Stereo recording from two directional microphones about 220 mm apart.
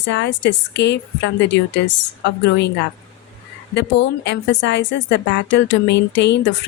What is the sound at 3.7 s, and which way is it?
A woman's voice, 55° left (ahead or behind).